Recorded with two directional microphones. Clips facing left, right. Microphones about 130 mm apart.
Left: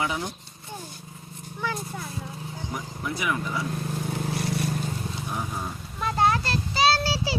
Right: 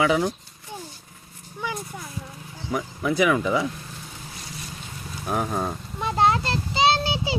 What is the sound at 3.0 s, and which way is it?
Speech, 90° right.